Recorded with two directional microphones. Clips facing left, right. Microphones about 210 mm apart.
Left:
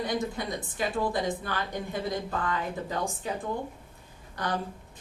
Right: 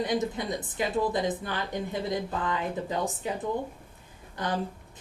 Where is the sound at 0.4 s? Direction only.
20° right (ahead or behind).